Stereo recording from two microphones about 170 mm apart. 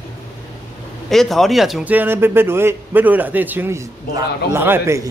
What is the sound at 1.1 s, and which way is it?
A man's voice, centre (ahead or behind).